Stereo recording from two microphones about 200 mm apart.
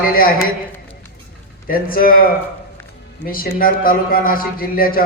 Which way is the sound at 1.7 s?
45° left (ahead or behind).